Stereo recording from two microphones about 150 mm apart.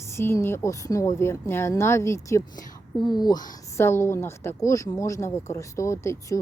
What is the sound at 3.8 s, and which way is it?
Speech, 15° left (ahead or behind).